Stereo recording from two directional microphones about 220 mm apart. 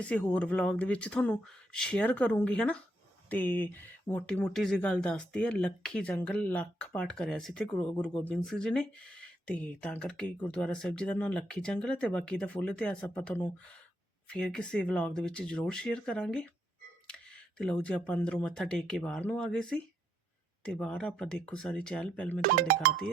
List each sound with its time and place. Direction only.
0.0 s speech: 5° left (ahead or behind)
22.4 s speech: 40° right (ahead or behind)